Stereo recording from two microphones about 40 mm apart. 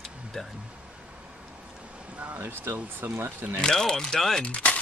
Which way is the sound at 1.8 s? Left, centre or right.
Right.